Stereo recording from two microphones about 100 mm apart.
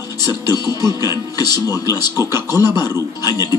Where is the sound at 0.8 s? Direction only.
30° right (ahead or behind).